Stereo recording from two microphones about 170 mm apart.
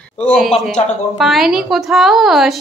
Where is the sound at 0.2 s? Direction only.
5° left (ahead or behind).